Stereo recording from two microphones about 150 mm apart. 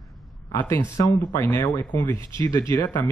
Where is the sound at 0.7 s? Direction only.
25° left (ahead or behind).